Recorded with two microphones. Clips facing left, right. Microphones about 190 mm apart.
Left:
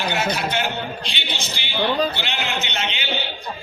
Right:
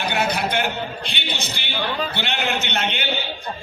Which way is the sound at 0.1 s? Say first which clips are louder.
Right 3 dB; 55° right (ahead or behind).